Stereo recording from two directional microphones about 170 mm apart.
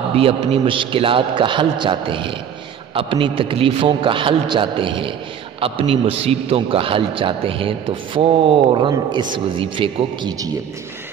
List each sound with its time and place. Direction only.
0.1 s a man's voice: 35° right (ahead or behind)